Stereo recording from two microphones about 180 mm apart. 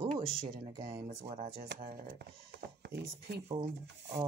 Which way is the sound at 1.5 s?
60° right (ahead or behind).